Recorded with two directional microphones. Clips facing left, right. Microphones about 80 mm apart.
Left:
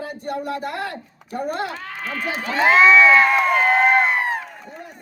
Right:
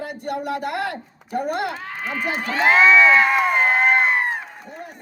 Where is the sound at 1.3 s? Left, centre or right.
Right.